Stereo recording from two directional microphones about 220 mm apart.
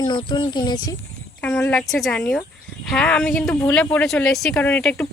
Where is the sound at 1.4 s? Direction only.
5° left (ahead or behind).